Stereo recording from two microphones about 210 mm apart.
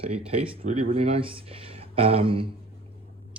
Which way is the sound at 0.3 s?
25° right (ahead or behind).